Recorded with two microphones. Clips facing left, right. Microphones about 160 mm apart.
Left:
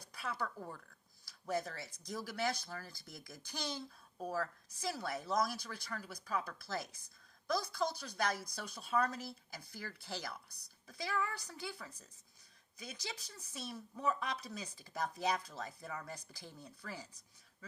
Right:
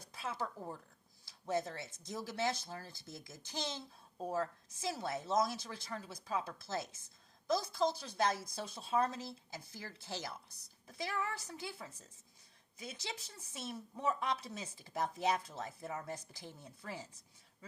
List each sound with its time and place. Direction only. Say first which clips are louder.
0.0 s speech: even; 25° right (ahead or behind)